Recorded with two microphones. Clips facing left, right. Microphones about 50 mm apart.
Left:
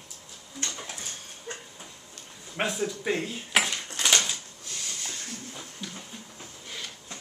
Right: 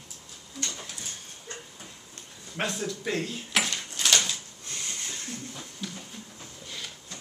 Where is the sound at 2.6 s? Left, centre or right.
Centre.